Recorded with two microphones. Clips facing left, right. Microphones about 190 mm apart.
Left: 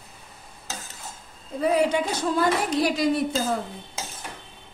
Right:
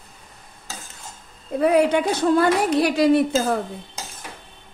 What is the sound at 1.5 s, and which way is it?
A woman's voice, 65° right (ahead or behind).